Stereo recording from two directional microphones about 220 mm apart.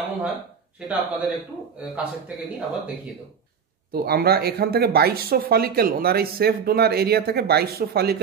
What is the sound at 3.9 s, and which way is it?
Speech, 45° right (ahead or behind).